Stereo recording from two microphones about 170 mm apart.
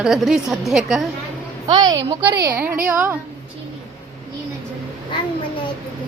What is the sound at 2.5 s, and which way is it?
Speech, 15° right (ahead or behind).